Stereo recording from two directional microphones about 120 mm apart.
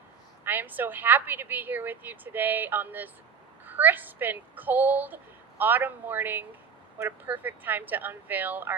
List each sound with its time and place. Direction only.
0.4 s a woman's voice: 15° right (ahead or behind)